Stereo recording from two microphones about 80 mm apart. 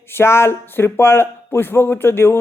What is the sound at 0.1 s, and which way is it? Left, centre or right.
Speech, left.